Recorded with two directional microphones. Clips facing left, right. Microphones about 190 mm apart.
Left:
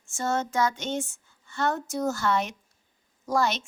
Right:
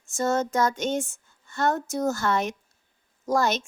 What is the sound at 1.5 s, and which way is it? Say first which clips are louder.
Speech: right 2 dB; 45° right (ahead or behind).